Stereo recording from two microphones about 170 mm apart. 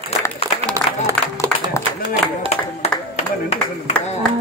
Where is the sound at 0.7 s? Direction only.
20° right (ahead or behind).